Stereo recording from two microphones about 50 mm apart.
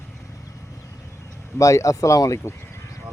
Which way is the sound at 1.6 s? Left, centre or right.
Left.